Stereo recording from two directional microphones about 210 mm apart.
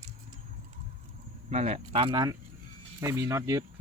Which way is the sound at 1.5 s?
30° right (ahead or behind).